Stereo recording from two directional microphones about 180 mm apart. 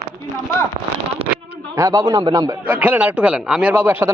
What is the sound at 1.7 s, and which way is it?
Speech, 20° right (ahead or behind).